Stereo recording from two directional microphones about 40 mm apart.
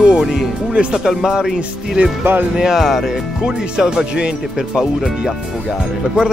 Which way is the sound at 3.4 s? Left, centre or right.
Right.